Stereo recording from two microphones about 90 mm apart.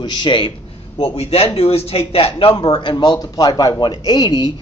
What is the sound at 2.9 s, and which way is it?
Speech, 50° left (ahead or behind).